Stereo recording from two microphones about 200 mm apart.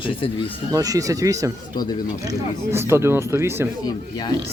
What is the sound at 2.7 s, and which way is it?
Speech, 15° right (ahead or behind).